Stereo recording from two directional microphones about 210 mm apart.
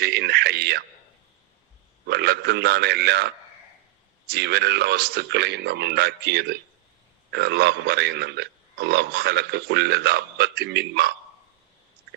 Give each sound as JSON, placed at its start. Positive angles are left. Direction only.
{"t": 0.0, "sound": "speech", "side_deg": -55}
{"t": 2.0, "sound": "speech", "side_deg": -50}